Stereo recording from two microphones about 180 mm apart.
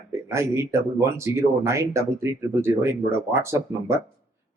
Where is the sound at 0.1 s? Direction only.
15° right (ahead or behind).